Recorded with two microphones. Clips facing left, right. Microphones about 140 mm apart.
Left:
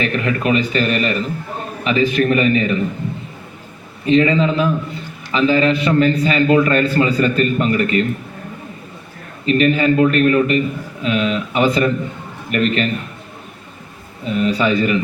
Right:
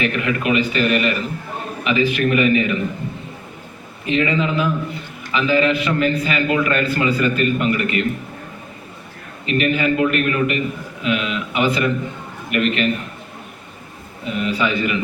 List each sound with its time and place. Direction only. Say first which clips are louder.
0.0 s a man's voice: left 2 dB; 35° left (ahead or behind)
4.0 s a man's voice: left 5 dB; 35° left (ahead or behind)
9.5 s a man's voice: left 4 dB; 35° left (ahead or behind)
14.3 s a man's voice: left 4 dB; 35° left (ahead or behind)